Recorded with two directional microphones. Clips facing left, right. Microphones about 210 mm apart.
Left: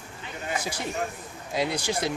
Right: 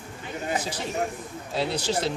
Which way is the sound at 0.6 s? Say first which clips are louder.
Left 1 dB; 10° left (ahead or behind).